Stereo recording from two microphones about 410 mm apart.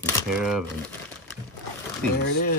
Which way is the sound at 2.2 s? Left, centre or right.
Left.